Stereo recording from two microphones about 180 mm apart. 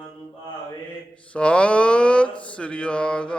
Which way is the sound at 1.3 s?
5° left (ahead or behind).